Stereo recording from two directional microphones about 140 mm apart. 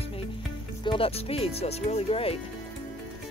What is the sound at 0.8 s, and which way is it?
Speech, 40° left (ahead or behind).